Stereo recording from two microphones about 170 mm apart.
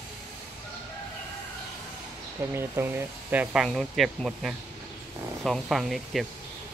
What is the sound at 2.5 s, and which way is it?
Speech, 15° right (ahead or behind).